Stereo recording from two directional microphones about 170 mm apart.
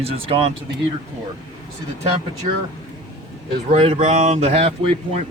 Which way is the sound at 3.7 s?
35° right (ahead or behind).